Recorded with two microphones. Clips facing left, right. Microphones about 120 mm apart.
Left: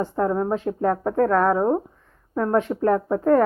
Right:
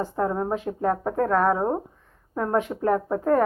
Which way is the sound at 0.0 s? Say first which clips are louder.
Left 3 dB; 10° right (ahead or behind).